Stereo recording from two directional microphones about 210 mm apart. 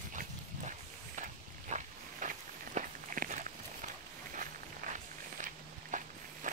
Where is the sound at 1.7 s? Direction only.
35° right (ahead or behind).